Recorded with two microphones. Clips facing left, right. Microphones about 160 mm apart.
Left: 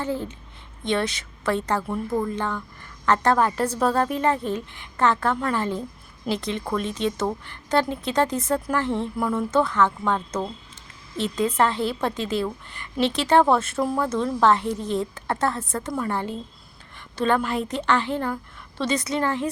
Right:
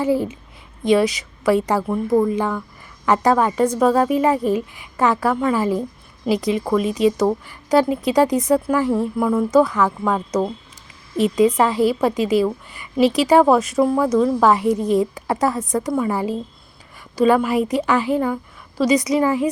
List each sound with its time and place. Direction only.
0.0 s a woman's voice: 10° right (ahead or behind)
1.5 s a woman's voice: 10° right (ahead or behind)